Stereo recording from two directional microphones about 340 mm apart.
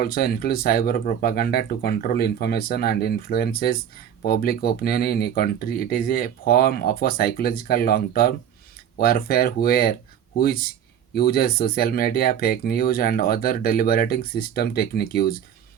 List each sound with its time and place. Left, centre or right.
0.0 s speech: left